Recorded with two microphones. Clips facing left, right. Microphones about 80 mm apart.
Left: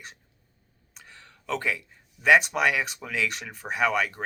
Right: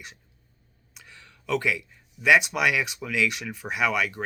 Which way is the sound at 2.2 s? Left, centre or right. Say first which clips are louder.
Even; left.